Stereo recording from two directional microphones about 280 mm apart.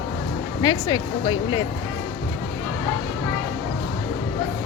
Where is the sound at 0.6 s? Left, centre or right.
Centre.